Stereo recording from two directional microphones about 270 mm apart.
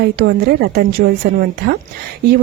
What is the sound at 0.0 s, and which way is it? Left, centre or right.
Speech, right.